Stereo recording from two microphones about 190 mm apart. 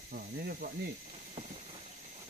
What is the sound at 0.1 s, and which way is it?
Speech, 55° right (ahead or behind).